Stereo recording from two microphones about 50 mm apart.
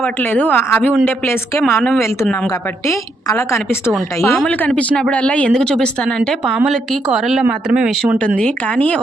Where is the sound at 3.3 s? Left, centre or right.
Left.